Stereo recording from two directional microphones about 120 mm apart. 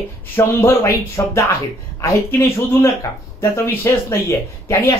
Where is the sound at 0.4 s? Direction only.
20° left (ahead or behind).